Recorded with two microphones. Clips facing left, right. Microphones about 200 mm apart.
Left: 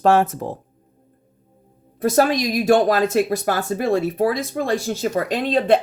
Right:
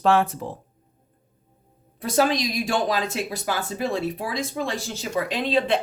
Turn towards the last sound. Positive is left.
turn(degrees=45)  # may be behind; listen again after turning